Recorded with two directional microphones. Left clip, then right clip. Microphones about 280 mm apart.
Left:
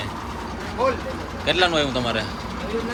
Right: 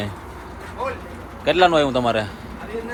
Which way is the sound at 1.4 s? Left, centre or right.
Centre.